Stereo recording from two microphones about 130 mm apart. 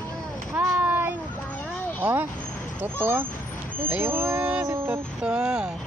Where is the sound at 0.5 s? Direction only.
20° right (ahead or behind).